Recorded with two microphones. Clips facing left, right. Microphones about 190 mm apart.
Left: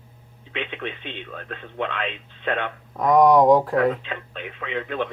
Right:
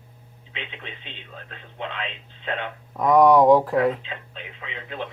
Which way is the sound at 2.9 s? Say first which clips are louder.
Even; centre (ahead or behind).